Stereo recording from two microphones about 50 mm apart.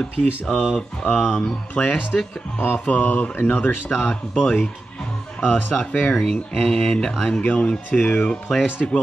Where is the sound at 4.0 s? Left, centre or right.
Centre.